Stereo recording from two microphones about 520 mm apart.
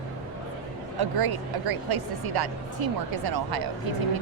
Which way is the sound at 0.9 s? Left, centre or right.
Right.